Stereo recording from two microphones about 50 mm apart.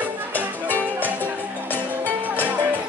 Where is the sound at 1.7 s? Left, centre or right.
Left.